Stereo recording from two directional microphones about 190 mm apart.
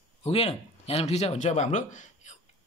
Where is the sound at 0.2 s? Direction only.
30° left (ahead or behind).